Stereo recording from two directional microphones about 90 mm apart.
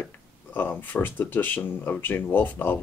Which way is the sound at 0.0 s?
20° left (ahead or behind).